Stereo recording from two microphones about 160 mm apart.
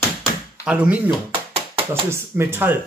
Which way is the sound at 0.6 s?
5° right (ahead or behind).